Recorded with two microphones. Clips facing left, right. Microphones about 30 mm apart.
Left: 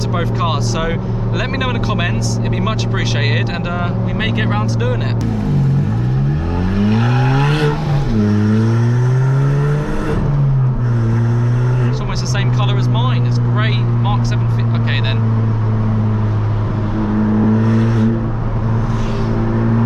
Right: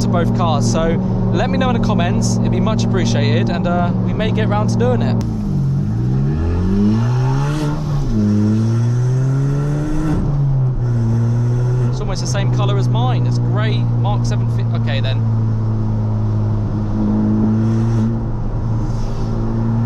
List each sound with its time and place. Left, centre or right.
0.1 s speech: centre
4.2 s speech: centre
6.6 s vehicle: left
17.0 s vehicle: left